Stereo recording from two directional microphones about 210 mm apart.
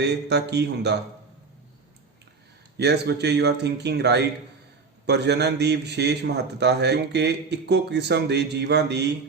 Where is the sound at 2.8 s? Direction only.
50° right (ahead or behind).